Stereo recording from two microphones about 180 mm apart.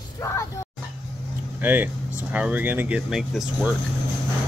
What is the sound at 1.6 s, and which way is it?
A child's voice, 10° right (ahead or behind).